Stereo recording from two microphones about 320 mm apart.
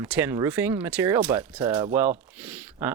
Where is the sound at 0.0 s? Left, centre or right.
Centre.